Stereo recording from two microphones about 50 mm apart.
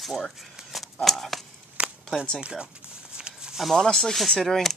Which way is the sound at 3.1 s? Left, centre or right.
Centre.